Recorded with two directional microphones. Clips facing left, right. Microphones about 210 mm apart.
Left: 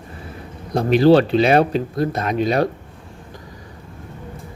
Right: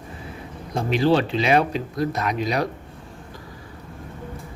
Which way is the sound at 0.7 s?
35° left (ahead or behind).